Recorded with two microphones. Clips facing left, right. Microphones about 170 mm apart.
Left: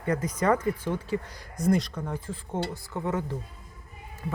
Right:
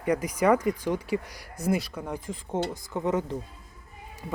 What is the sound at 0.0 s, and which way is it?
Speech, 15° right (ahead or behind).